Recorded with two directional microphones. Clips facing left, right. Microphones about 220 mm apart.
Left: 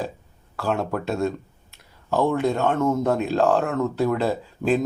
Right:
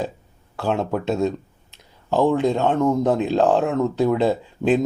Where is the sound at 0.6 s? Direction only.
20° right (ahead or behind).